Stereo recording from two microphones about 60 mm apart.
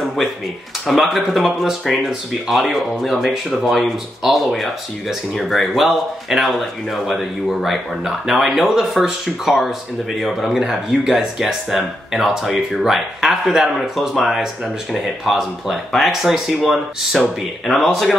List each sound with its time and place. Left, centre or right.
0.8 s speech: centre